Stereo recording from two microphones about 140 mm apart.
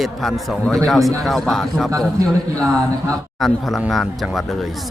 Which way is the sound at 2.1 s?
25° right (ahead or behind).